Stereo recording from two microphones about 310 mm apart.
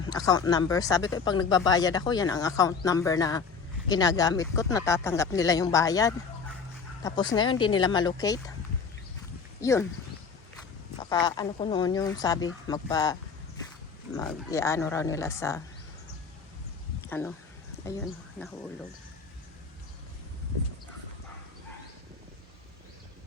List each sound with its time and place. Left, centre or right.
0.1 s speech: centre
9.6 s speech: centre
11.0 s speech: centre
14.2 s speech: centre
17.0 s a sound: centre
18.4 s speech: centre